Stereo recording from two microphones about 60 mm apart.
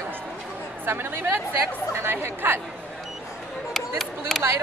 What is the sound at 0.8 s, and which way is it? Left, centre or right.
A woman's voice, right.